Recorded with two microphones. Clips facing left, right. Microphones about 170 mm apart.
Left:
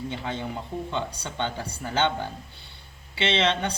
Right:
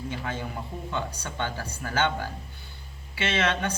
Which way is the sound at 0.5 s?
20° left (ahead or behind).